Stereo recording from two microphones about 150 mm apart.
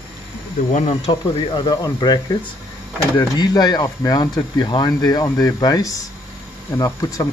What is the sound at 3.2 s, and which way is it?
Speech, 30° left (ahead or behind).